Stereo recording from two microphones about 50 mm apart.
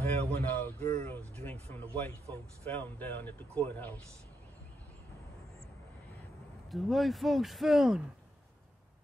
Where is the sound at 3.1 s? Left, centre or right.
Left.